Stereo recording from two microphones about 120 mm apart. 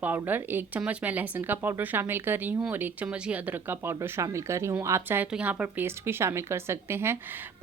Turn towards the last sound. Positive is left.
turn(degrees=-20)  # may be behind; listen again after turning